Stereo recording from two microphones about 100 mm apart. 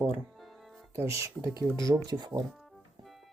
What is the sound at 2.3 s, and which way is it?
Speech, 55° right (ahead or behind).